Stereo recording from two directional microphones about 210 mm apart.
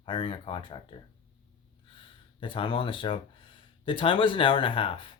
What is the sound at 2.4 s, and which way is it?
Speech, 25° left (ahead or behind).